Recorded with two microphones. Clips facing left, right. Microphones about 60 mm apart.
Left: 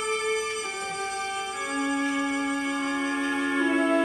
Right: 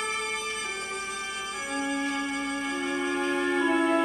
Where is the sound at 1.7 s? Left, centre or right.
Centre.